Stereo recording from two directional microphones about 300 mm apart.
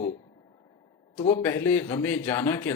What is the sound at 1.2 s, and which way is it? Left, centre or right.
Speech, centre.